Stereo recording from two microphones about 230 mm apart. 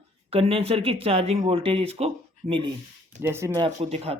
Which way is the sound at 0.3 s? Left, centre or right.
Right.